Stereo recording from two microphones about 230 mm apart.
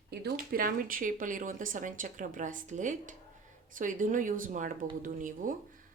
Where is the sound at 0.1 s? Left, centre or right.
Right.